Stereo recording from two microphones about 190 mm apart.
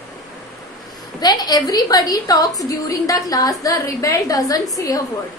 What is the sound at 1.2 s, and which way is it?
A woman's voice, 20° left (ahead or behind).